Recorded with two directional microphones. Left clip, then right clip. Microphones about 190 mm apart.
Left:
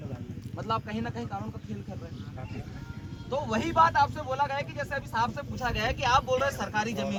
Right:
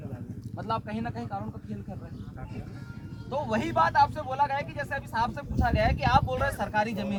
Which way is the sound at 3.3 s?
40° right (ahead or behind).